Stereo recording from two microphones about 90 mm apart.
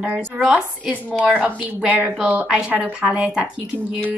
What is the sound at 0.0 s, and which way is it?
A woman's voice, 15° right (ahead or behind).